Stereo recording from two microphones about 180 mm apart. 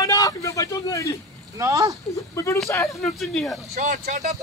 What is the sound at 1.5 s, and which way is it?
Speech, 20° right (ahead or behind).